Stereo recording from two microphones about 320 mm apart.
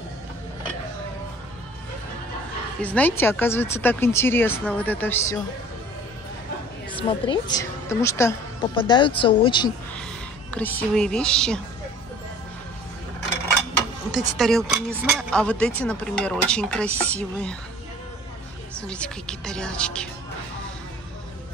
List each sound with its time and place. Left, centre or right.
2.8 s a woman's voice: centre
6.9 s a woman's voice: centre
10.5 s speech: centre
14.1 s speech: centre
18.8 s speech: centre